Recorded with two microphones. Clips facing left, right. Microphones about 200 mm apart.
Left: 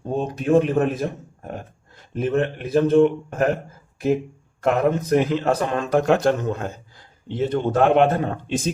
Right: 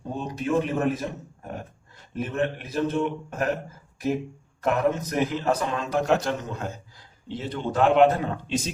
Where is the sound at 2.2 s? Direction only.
55° left (ahead or behind).